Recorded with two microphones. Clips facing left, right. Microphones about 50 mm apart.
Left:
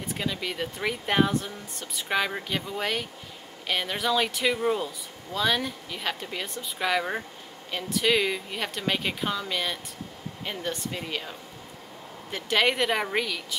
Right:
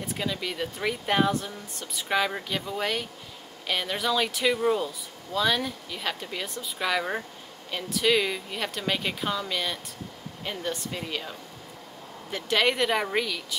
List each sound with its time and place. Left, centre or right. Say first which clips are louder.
0.0 s speech: even; centre